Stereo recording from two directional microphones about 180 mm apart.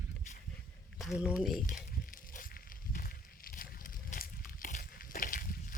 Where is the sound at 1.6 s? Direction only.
50° left (ahead or behind).